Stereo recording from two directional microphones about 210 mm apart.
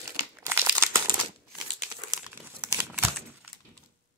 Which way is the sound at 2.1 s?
15° right (ahead or behind).